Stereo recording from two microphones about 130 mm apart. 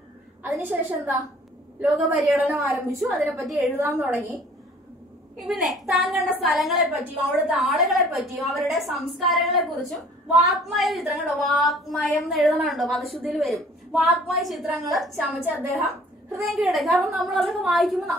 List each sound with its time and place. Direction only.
0.4 s a woman's voice: 15° right (ahead or behind)
2.9 s a woman's voice: 15° right (ahead or behind)
5.4 s a woman's voice: centre (ahead or behind)
15.4 s a woman's voice: 10° right (ahead or behind)
16.3 s a woman's voice: centre (ahead or behind)